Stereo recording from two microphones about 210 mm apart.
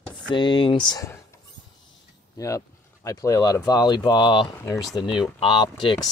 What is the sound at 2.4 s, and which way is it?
Speech, 15° left (ahead or behind).